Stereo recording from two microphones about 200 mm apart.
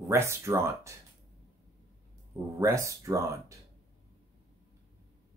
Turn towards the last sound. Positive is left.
turn(degrees=-15)  # may be behind; listen again after turning